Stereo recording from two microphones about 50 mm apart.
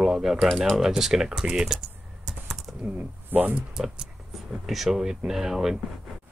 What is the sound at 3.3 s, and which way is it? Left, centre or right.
Speech, right.